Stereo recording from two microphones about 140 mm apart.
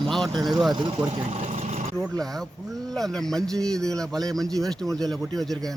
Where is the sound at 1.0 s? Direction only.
50° right (ahead or behind).